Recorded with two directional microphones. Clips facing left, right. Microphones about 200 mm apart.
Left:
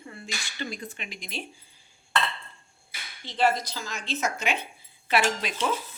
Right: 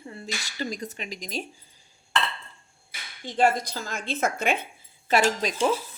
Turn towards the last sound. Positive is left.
turn(degrees=-35)  # may be behind; listen again after turning